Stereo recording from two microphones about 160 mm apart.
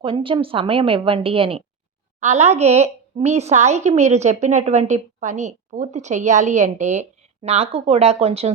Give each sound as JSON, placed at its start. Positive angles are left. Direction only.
{"t": 0.0, "sound": "a woman's voice", "side_deg": -35}